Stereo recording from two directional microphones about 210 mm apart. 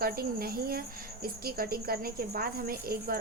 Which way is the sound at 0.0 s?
45° right (ahead or behind).